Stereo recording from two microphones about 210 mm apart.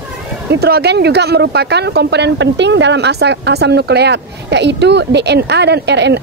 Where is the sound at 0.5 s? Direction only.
50° right (ahead or behind).